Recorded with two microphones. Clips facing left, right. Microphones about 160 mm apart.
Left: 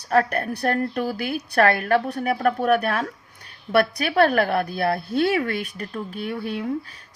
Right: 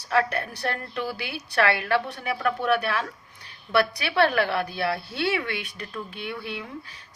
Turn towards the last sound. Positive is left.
turn(degrees=40)  # may be behind; listen again after turning